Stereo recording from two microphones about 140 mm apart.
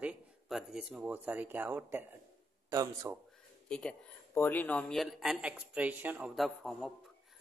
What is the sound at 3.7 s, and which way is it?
Speech, 5° left (ahead or behind).